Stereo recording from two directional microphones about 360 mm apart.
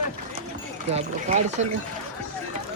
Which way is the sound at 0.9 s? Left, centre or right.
Centre.